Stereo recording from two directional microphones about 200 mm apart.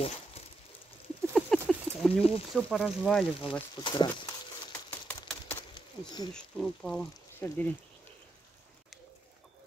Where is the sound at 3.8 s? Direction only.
20° left (ahead or behind).